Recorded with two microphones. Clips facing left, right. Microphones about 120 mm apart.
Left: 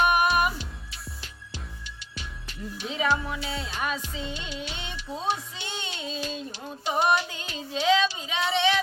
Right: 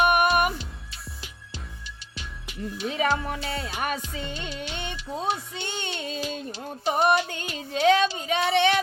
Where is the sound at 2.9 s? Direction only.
50° right (ahead or behind).